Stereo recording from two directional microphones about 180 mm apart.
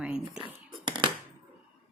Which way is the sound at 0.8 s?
25° right (ahead or behind).